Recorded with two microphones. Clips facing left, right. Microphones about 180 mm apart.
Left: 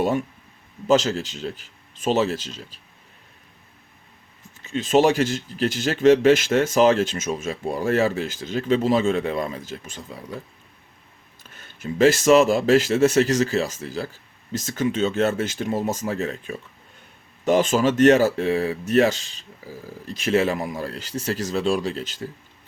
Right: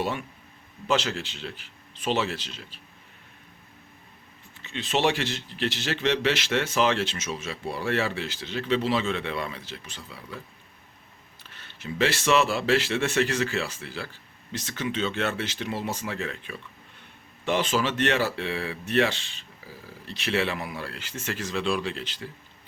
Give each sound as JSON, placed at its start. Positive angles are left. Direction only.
{"t": 0.9, "sound": "speech", "side_deg": 40}
{"t": 4.6, "sound": "speech", "side_deg": 45}
{"t": 11.4, "sound": "speech", "side_deg": 45}